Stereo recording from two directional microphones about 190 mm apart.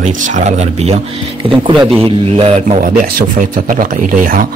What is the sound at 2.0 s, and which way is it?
Speech, 30° right (ahead or behind).